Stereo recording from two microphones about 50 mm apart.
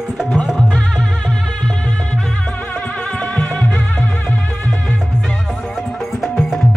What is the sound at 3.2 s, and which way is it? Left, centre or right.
Music, left.